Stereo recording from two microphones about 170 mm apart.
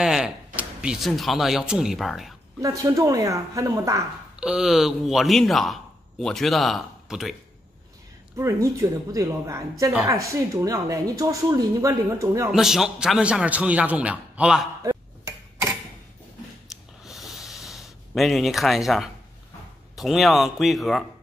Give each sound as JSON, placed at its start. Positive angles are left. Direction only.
{"t": 0.0, "sound": "speech", "side_deg": -5}
{"t": 2.6, "sound": "a woman's voice", "side_deg": -20}
{"t": 4.4, "sound": "a man's voice", "side_deg": -5}
{"t": 8.4, "sound": "a man's voice", "side_deg": -15}
{"t": 12.4, "sound": "a man's voice", "side_deg": 0}
{"t": 14.8, "sound": "dishes", "side_deg": -20}
{"t": 16.6, "sound": "snort", "side_deg": 0}
{"t": 20.0, "sound": "speech", "side_deg": 0}